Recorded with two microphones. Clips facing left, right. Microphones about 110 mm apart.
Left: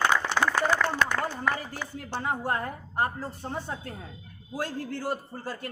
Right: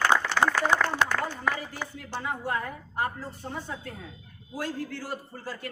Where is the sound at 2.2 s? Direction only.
40° left (ahead or behind).